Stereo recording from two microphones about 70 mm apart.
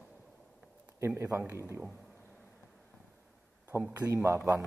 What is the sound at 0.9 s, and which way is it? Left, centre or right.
Speech, right.